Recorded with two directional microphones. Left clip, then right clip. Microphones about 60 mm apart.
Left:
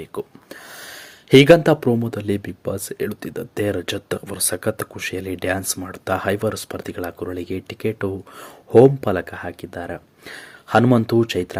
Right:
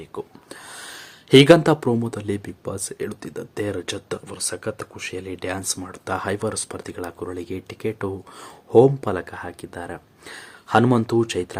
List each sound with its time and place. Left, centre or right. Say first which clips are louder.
0.5 s speech: left 1 dB; centre
2.0 s speech: left 3 dB; left
4.3 s speech: left 7 dB; left
5.5 s speech: left 2 dB; left